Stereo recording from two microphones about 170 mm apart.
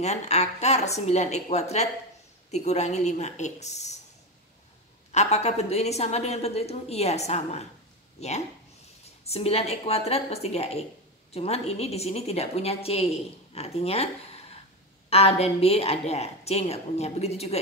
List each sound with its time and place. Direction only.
0.0 s a woman's voice: 40° left (ahead or behind)
5.1 s a woman's voice: 40° left (ahead or behind)